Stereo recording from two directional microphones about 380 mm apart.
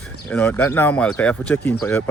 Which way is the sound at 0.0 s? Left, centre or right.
Centre.